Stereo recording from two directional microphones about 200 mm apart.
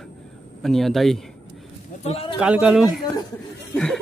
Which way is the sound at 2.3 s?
5° right (ahead or behind).